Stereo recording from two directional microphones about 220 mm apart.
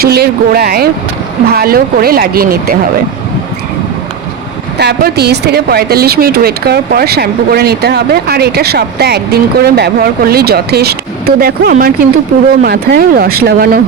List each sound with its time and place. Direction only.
0.0 s speech: 45° right (ahead or behind)
4.8 s speech: 50° right (ahead or behind)